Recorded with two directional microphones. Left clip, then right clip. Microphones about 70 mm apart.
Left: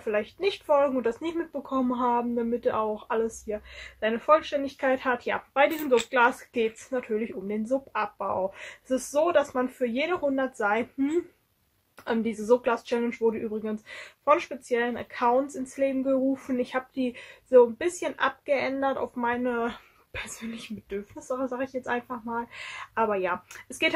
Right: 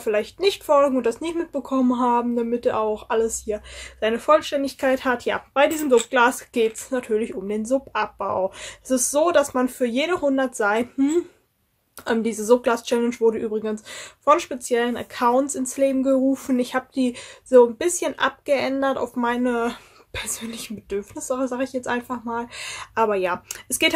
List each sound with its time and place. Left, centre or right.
0.0 s speech: right
15.8 s speech: right
23.8 s speech: right